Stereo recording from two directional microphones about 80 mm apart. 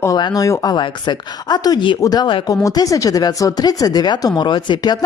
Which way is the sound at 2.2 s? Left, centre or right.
Left.